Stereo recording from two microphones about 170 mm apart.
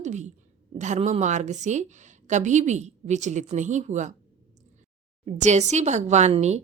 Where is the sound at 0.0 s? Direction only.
45° right (ahead or behind).